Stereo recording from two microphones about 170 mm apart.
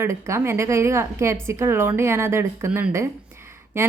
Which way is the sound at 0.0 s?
15° right (ahead or behind).